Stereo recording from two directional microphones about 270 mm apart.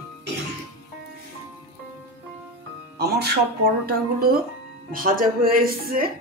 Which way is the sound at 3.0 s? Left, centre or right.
Right.